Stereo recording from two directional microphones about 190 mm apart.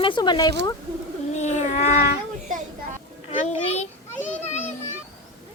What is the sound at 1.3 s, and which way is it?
Speech, 35° left (ahead or behind).